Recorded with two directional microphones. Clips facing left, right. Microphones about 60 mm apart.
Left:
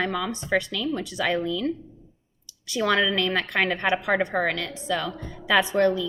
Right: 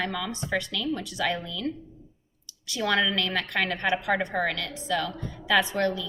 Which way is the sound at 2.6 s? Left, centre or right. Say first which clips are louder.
Left 3 dB; left.